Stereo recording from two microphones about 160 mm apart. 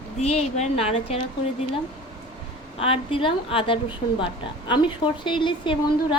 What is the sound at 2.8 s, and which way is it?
A woman's voice, 35° left (ahead or behind).